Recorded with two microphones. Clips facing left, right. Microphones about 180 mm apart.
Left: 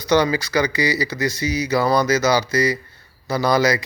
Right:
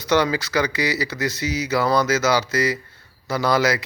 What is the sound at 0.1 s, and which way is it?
Speech, 15° left (ahead or behind).